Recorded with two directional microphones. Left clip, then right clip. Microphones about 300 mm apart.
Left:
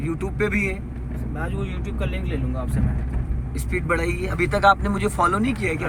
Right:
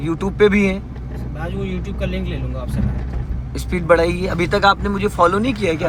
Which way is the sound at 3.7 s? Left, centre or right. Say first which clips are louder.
Right 9 dB; centre.